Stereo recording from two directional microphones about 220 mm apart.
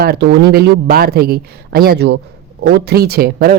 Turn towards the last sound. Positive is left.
turn(degrees=-45)  # may be behind; listen again after turning